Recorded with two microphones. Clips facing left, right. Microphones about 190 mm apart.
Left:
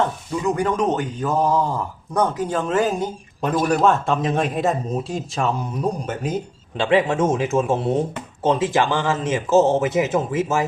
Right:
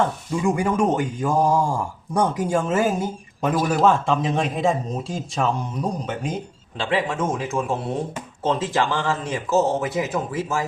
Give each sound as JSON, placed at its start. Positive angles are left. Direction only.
{"t": 0.4, "sound": "speech", "side_deg": -10}
{"t": 6.7, "sound": "speech", "side_deg": 20}